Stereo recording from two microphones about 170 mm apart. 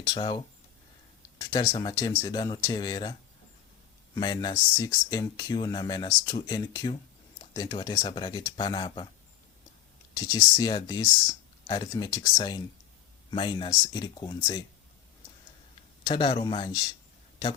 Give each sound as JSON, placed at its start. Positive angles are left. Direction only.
{"t": 0.0, "sound": "speech", "side_deg": 25}
{"t": 10.2, "sound": "speech", "side_deg": 20}
{"t": 16.0, "sound": "speech", "side_deg": 30}